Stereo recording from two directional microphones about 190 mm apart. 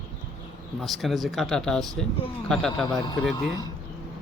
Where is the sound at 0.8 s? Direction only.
Centre (ahead or behind).